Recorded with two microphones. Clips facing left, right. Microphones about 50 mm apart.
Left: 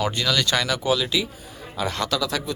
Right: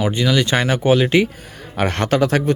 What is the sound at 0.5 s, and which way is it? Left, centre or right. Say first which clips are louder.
A man's voice: right 6 dB; right.